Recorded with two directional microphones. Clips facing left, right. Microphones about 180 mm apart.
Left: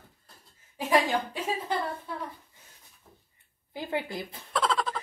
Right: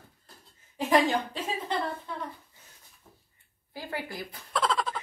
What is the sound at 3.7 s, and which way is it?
Speech, 20° left (ahead or behind).